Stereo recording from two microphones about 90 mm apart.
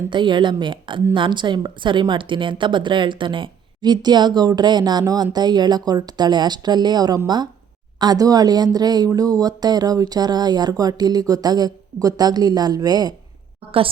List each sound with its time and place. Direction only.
0.1 s a woman's voice: 60° right (ahead or behind)
13.7 s a woman's voice: 90° right